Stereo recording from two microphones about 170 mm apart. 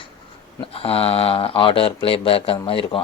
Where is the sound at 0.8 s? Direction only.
35° left (ahead or behind).